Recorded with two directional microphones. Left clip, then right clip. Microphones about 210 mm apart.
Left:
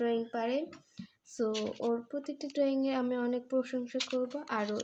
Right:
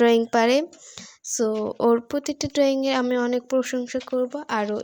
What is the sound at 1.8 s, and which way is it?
Speech, 60° right (ahead or behind).